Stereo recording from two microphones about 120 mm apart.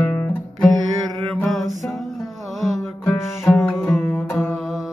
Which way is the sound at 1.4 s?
Centre (ahead or behind).